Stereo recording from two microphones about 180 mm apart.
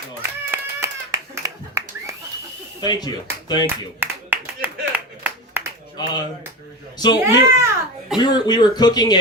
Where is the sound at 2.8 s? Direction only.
20° left (ahead or behind).